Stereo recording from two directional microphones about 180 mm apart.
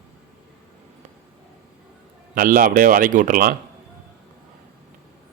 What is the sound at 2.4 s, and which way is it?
A man's voice, 50° right (ahead or behind).